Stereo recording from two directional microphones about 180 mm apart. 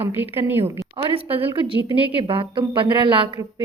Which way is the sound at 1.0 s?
30° right (ahead or behind).